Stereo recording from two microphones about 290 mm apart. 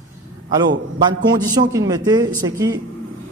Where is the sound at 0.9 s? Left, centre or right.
Centre.